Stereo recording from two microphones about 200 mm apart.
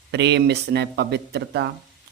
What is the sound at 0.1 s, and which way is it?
Speech, 60° right (ahead or behind).